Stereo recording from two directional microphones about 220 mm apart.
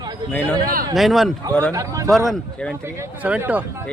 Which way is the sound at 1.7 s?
15° right (ahead or behind).